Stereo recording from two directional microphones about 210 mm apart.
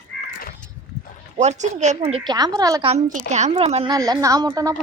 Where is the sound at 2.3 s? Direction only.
20° right (ahead or behind).